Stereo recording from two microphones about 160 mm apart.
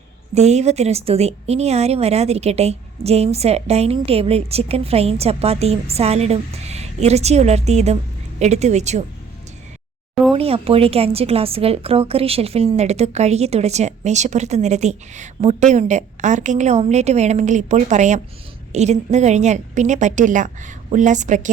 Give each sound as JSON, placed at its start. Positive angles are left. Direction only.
{"t": 0.3, "sound": "a woman's voice", "side_deg": -45}
{"t": 10.3, "sound": "a woman's voice", "side_deg": -35}